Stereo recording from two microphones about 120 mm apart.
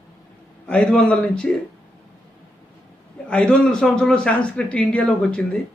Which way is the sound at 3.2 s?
10° left (ahead or behind).